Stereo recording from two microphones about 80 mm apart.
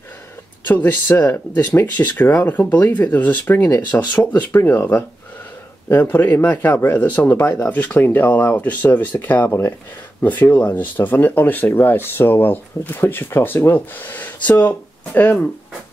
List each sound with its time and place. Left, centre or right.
0.7 s speech: left